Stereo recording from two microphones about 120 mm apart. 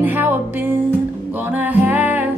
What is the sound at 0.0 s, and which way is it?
Music, 15° right (ahead or behind).